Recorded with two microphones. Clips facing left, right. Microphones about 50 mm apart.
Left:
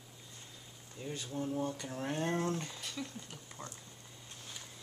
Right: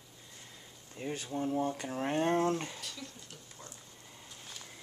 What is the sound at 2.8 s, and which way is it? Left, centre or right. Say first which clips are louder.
Speech: left 3 dB; centre.